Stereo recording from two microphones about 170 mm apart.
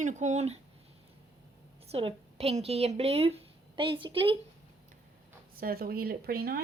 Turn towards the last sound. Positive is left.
turn(degrees=-65)  # may be behind; listen again after turning